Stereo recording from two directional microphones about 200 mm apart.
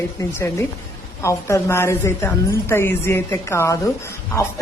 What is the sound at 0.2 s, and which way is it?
A woman's voice, 10° left (ahead or behind).